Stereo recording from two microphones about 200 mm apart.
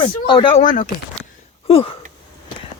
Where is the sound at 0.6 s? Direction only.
40° left (ahead or behind).